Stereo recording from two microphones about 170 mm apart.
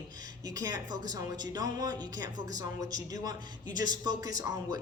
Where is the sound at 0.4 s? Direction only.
25° right (ahead or behind).